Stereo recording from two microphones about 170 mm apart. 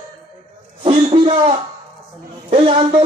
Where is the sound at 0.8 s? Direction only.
30° right (ahead or behind).